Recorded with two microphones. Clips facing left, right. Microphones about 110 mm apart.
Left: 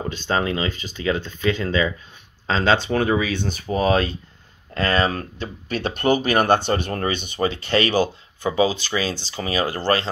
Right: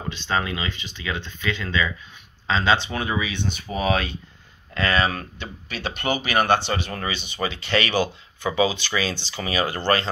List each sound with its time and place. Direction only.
0.1 s speech: 45° left (ahead or behind)